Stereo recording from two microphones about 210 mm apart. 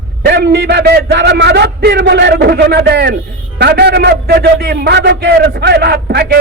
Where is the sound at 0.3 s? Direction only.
55° right (ahead or behind).